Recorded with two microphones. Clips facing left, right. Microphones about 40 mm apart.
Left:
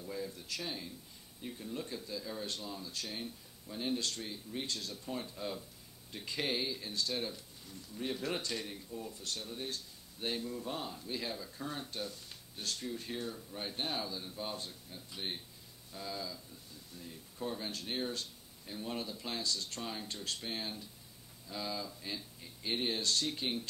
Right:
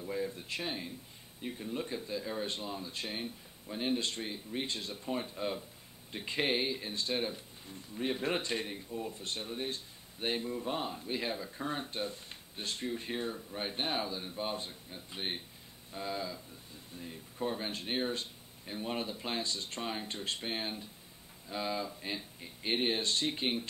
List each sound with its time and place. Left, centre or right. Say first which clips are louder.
0.0 s speech: right 5 dB; right